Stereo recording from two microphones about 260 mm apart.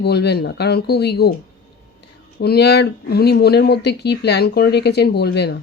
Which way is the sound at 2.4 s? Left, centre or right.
Left.